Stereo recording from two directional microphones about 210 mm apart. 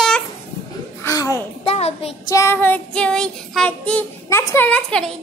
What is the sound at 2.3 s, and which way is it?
Child singing, 15° left (ahead or behind).